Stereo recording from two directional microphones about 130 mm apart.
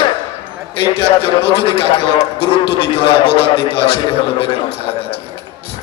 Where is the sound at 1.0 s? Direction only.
45° left (ahead or behind).